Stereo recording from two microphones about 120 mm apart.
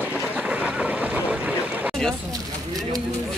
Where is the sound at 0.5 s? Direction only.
10° right (ahead or behind).